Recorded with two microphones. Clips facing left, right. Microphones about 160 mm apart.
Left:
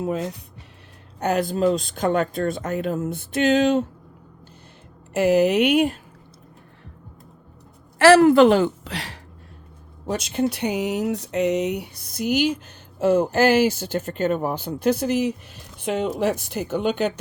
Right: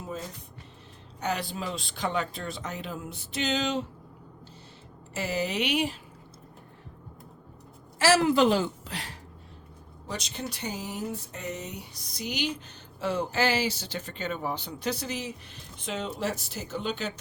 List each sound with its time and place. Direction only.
0.0 s speech: 75° left (ahead or behind)
1.2 s speech: 50° left (ahead or behind)
5.1 s speech: 60° left (ahead or behind)
7.9 s speech: 60° left (ahead or behind); by 9.1 s 75° left (ahead or behind)
10.3 s speech: 60° left (ahead or behind)